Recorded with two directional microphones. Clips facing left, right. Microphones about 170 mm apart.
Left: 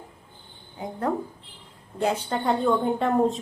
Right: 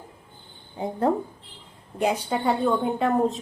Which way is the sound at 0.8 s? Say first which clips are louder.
Right 4 dB; 30° right (ahead or behind).